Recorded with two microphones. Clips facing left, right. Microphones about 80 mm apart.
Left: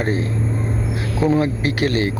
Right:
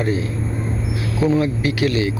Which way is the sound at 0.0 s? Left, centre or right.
Left.